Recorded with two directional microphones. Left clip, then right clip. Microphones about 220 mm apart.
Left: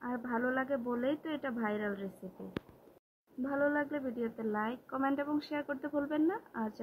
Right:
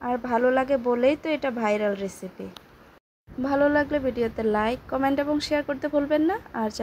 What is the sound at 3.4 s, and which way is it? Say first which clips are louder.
A woman's voice: right 11 dB; 25° right (ahead or behind).